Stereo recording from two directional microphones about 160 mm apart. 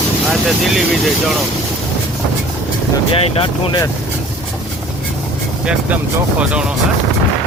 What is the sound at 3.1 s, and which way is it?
Speech, 35° left (ahead or behind).